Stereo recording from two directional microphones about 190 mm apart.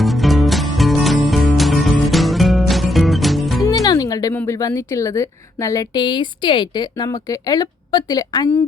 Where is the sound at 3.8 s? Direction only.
20° left (ahead or behind).